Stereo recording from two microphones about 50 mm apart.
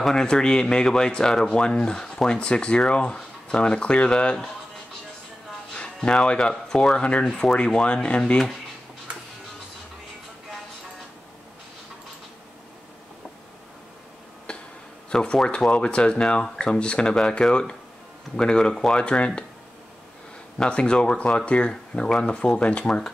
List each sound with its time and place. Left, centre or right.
0.0 s speech: centre
5.7 s music: centre
6.5 s speech: centre
14.5 s a sound: left
15.0 s speech: centre
20.6 s speech: centre